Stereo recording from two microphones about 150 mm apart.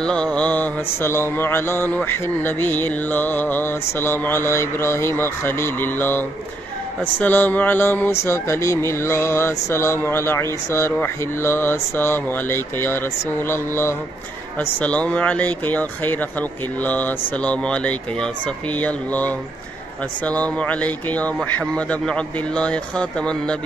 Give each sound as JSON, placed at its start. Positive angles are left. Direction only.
{"t": 0.0, "sound": "mantra", "side_deg": 5}